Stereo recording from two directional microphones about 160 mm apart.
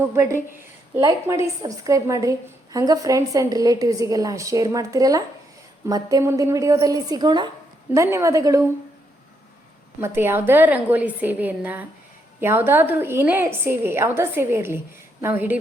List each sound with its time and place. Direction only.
0.1 s a woman's voice: 15° right (ahead or behind)
1.6 s a woman's voice: 20° right (ahead or behind)
10.0 s a woman's voice: 15° right (ahead or behind)